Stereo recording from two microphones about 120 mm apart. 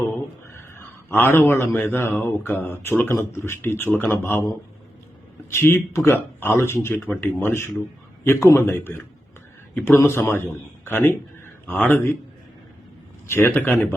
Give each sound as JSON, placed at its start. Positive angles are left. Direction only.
{"t": 0.5, "sound": "a man's voice", "side_deg": 20}
{"t": 5.5, "sound": "a man's voice", "side_deg": 20}
{"t": 13.2, "sound": "a man's voice", "side_deg": 20}